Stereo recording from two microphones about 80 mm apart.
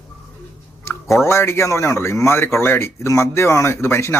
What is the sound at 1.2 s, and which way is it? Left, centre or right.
A man's voice, left.